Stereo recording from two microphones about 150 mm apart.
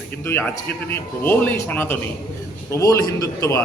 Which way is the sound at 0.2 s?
15° left (ahead or behind).